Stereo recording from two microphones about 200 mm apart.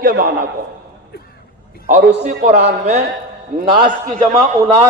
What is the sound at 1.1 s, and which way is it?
Speech, 50° left (ahead or behind).